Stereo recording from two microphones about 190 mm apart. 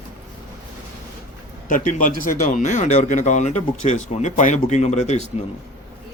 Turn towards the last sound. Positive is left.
turn(degrees=35)  # may be behind; listen again after turning